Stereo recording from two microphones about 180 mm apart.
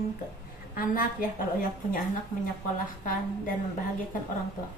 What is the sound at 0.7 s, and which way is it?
A woman's voice, 50° left (ahead or behind).